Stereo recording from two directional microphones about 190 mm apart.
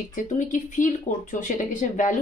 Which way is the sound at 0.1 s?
40° left (ahead or behind).